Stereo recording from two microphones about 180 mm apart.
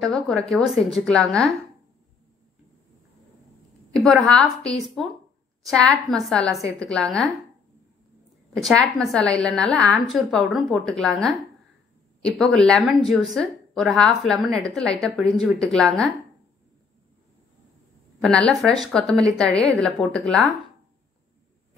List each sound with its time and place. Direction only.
0.0 s a woman's voice: 5° left (ahead or behind)
3.9 s a woman's voice: centre (ahead or behind)
8.5 s a woman's voice: 5° left (ahead or behind)
18.2 s a woman's voice: 5° left (ahead or behind)